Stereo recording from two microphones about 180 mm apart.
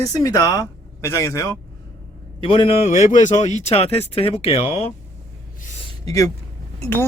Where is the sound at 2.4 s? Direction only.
30° left (ahead or behind).